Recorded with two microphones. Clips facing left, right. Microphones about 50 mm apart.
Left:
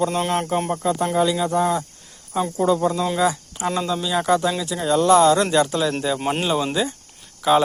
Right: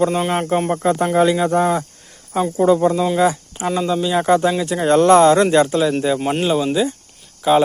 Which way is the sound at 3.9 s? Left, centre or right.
Centre.